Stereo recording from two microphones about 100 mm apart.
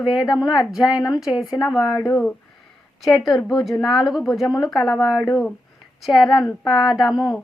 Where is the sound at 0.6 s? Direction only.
5° right (ahead or behind).